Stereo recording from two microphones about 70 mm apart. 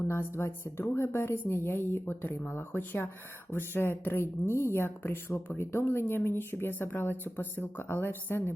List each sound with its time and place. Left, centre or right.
0.0 s speech: left